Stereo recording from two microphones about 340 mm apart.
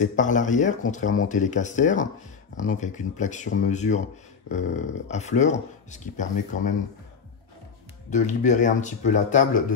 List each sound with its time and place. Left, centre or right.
0.0 s speech: left
8.1 s speech: left